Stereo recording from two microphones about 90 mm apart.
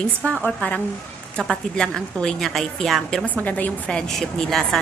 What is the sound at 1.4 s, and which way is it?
Speech, 5° left (ahead or behind).